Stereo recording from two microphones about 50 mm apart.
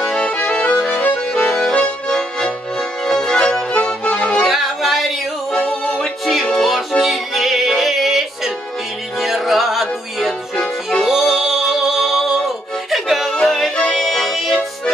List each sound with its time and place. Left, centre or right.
0.0 s accordion: centre
0.3 s accordion: left
3.1 s music: centre
4.5 s yodeling: centre
5.6 s music: left
6.0 s music: centre
10.5 s music: centre
11.1 s music: centre